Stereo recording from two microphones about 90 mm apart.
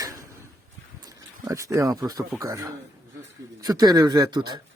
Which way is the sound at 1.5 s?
40° right (ahead or behind).